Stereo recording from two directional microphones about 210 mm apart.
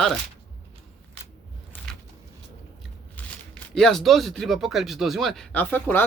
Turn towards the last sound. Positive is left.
turn(degrees=10)  # may be behind; listen again after turning